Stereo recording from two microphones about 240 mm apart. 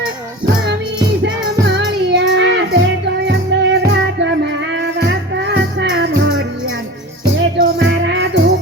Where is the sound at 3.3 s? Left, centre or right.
Right.